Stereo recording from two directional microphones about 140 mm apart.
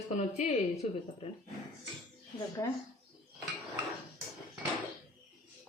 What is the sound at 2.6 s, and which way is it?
Speech, 20° left (ahead or behind).